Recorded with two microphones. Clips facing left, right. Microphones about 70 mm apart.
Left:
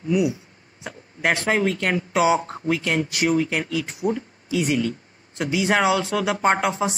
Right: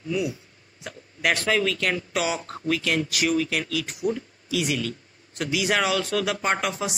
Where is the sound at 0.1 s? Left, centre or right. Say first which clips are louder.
Left 6 dB; centre.